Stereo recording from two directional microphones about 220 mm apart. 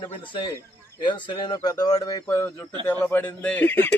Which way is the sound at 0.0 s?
20° left (ahead or behind).